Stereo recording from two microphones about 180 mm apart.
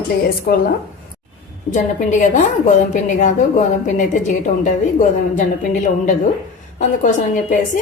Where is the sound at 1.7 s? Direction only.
45° left (ahead or behind).